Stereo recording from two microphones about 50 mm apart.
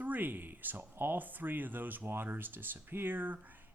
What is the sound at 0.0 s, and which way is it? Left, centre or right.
Speech, right.